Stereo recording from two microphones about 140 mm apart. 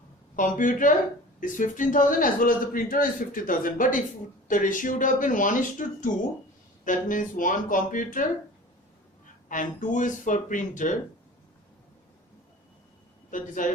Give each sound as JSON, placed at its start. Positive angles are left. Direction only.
{"t": 0.3, "sound": "a man's voice", "side_deg": 70}
{"t": 9.5, "sound": "speech", "side_deg": 70}
{"t": 13.3, "sound": "a man's voice", "side_deg": 70}